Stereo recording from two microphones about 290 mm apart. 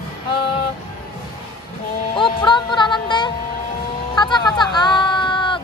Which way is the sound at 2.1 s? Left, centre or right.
Centre.